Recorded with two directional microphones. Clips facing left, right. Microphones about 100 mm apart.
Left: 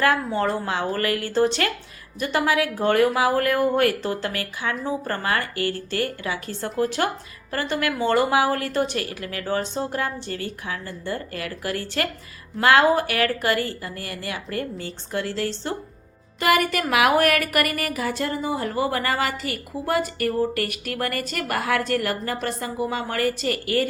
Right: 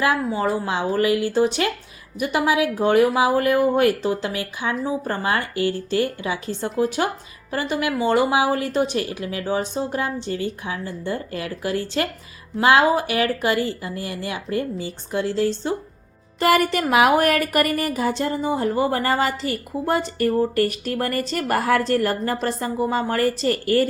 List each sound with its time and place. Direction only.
0.0 s speech: 10° right (ahead or behind)
16.4 s speech: 35° right (ahead or behind)